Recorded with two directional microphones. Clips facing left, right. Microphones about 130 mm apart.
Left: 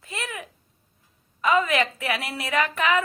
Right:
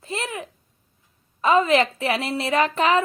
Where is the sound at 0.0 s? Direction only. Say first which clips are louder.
Right 5 dB; 30° right (ahead or behind).